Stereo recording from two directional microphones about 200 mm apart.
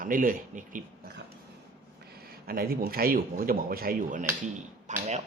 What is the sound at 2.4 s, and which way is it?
Speech, 50° right (ahead or behind).